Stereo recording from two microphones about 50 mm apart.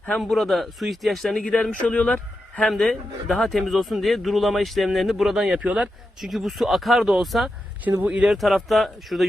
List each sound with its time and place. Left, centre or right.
0.2 s speech: centre
1.3 s speech: centre
2.6 s speech: centre
5.5 s speech: right
6.1 s speech: centre
8.0 s speech: right
8.3 s speech: centre